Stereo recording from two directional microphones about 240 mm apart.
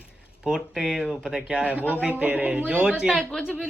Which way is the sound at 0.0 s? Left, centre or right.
Centre.